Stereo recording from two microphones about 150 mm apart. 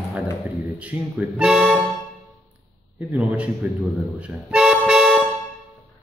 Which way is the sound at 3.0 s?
10° right (ahead or behind).